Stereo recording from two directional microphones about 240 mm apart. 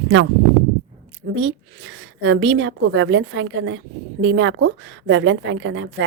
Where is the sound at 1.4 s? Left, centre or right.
Right.